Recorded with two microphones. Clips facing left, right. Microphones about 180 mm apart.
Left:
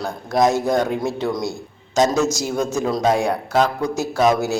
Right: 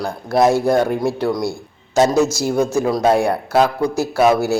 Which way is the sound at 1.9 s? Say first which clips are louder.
Right 3 dB; 10° right (ahead or behind).